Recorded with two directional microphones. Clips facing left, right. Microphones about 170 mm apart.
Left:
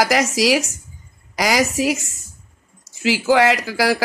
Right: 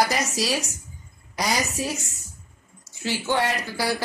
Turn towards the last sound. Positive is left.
turn(degrees=90)